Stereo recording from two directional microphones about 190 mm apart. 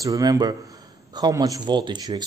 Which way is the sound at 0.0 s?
20° right (ahead or behind).